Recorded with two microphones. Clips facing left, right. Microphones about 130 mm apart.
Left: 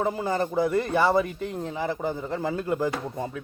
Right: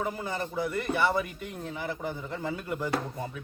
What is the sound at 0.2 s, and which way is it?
A man's voice, 35° left (ahead or behind).